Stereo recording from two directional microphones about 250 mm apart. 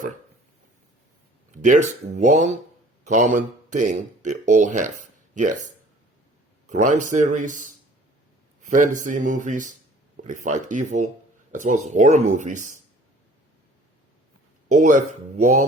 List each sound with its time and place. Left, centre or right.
1.6 s speech: right
6.7 s speech: right
14.7 s speech: right